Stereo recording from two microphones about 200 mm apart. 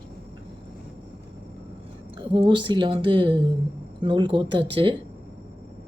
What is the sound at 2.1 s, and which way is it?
A woman's voice, 25° right (ahead or behind).